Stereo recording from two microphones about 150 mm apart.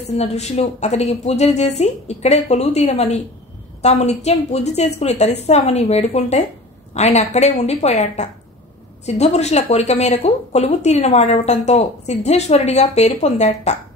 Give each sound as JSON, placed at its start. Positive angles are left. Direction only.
{"t": 0.0, "sound": "a woman's voice", "side_deg": 45}